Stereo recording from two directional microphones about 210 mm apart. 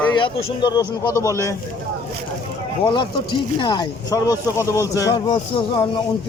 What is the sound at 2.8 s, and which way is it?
A man's voice, 20° left (ahead or behind).